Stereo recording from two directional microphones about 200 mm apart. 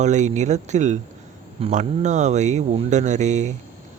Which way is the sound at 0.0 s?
35° right (ahead or behind).